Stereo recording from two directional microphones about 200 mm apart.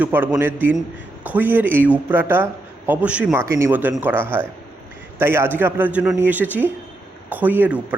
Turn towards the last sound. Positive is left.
turn(degrees=-5)  # may be behind; listen again after turning